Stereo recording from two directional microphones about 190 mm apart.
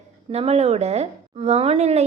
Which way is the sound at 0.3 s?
35° right (ahead or behind).